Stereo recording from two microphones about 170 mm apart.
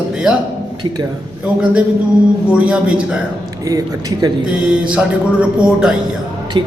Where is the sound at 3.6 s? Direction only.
20° right (ahead or behind).